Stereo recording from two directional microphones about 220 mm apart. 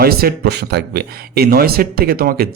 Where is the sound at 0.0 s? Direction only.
45° right (ahead or behind).